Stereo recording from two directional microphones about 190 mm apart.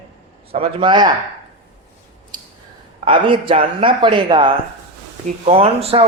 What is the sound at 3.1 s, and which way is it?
A man's voice, 25° right (ahead or behind).